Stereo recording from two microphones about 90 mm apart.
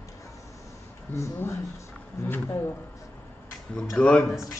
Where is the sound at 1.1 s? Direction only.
30° left (ahead or behind).